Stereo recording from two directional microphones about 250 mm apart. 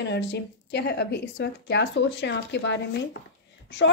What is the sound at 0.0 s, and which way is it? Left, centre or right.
A woman's voice, left.